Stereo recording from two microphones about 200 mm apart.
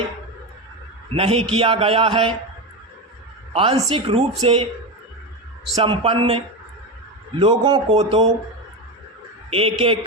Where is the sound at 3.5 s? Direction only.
30° right (ahead or behind).